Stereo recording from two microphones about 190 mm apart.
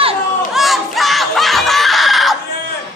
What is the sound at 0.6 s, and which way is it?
Screaming, centre (ahead or behind).